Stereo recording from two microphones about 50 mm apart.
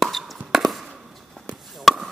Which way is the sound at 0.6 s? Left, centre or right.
Centre.